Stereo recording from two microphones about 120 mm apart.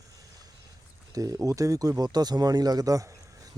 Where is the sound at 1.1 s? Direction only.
30° right (ahead or behind).